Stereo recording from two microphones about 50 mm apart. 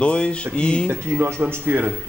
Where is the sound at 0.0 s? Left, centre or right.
Left.